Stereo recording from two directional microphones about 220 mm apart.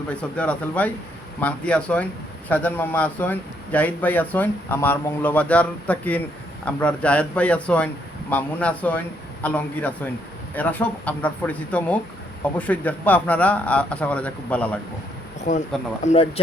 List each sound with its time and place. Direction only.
0.1 s a man's voice: 5° left (ahead or behind)
15.4 s speech: 35° left (ahead or behind)